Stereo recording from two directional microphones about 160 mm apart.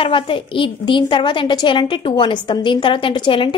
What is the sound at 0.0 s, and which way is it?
A woman's voice, 35° left (ahead or behind).